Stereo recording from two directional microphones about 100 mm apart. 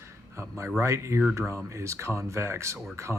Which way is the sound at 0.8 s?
30° right (ahead or behind).